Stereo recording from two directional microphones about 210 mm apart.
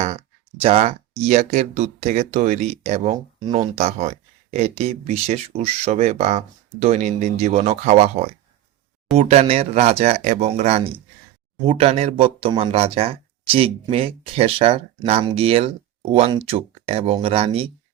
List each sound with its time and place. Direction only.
0.6 s speech: 30° right (ahead or behind)